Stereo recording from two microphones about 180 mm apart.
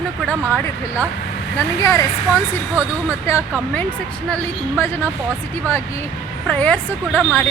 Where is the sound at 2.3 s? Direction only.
10° right (ahead or behind).